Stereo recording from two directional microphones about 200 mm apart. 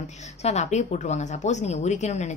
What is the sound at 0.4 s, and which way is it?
A woman's voice, 35° left (ahead or behind).